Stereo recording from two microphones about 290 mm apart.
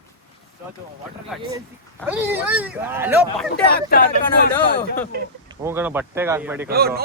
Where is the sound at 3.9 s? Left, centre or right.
Left.